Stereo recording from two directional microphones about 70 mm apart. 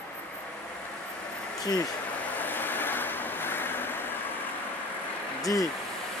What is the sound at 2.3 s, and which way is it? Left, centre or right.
Vehicle, left.